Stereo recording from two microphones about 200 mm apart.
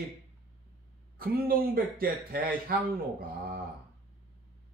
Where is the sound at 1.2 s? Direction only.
45° right (ahead or behind).